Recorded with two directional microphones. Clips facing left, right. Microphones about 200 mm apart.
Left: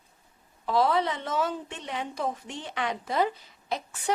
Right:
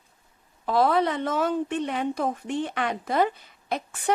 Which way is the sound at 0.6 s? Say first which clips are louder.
Right 3 dB; 55° right (ahead or behind).